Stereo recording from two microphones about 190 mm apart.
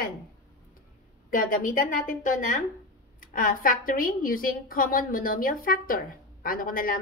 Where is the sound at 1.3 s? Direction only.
45° left (ahead or behind).